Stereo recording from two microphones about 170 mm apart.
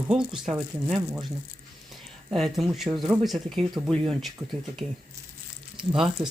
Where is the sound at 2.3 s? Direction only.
Centre (ahead or behind).